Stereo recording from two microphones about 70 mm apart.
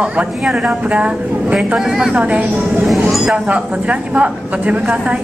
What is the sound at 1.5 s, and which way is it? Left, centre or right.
Speech, centre.